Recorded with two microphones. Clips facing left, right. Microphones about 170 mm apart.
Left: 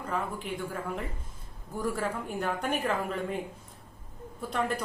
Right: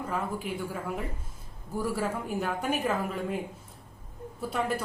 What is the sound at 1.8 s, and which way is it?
A woman's voice, 5° right (ahead or behind).